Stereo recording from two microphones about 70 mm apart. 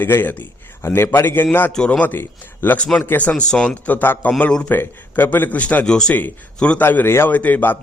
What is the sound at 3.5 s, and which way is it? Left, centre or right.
Speech, centre.